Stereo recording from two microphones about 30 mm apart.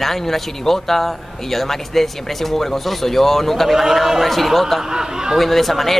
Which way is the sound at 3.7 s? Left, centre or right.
Centre.